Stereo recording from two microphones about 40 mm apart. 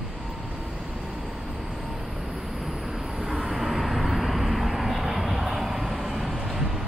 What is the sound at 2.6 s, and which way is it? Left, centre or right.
Vehicle, centre.